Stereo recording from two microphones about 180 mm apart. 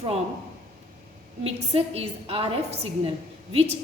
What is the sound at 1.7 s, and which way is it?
A woman's voice, 35° right (ahead or behind).